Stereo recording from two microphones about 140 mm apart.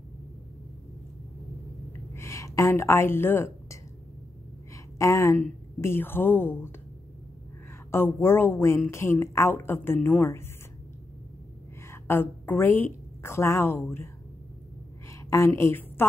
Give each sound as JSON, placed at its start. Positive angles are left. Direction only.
{"t": 1.9, "sound": "a sound", "side_deg": 20}
{"t": 4.9, "sound": "speech", "side_deg": 20}
{"t": 7.9, "sound": "speech", "side_deg": 15}
{"t": 11.9, "sound": "a woman's voice", "side_deg": 15}